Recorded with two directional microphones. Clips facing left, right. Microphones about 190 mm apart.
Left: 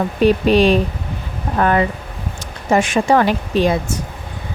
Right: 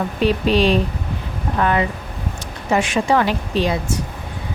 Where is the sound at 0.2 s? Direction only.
50° left (ahead or behind).